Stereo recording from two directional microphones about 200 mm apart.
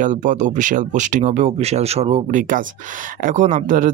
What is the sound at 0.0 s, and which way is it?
Speech, 40° right (ahead or behind).